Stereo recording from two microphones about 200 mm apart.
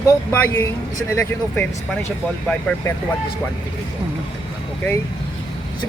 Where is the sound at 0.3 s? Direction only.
10° left (ahead or behind).